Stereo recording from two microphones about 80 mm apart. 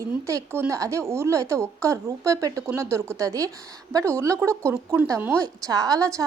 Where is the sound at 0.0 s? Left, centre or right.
Right.